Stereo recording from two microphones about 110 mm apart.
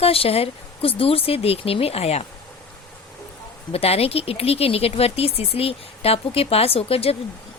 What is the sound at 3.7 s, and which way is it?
A woman's voice, 65° left (ahead or behind).